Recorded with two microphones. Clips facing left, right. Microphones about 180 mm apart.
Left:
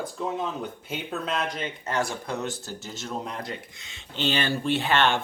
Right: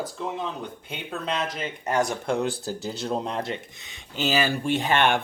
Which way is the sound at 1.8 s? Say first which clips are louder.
Right 5 dB; 15° right (ahead or behind).